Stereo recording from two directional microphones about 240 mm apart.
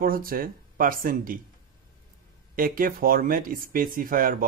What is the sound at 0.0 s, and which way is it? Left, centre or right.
Speech, right.